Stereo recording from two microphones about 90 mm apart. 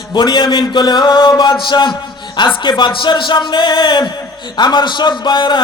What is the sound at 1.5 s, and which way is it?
A man's voice, 60° left (ahead or behind).